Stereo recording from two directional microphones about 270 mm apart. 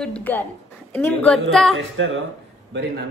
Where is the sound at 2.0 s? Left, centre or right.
Right.